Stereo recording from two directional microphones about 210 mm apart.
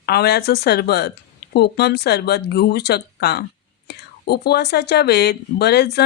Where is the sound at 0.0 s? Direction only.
50° left (ahead or behind).